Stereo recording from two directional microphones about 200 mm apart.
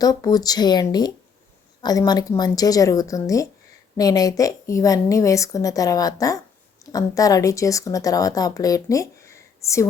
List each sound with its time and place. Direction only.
0.0 s a woman's voice: 20° left (ahead or behind)